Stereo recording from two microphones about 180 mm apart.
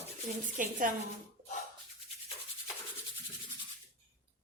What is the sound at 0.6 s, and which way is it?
Speech, 45° right (ahead or behind).